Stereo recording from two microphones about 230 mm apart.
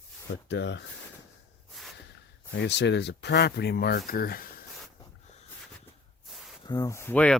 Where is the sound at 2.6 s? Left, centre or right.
Left.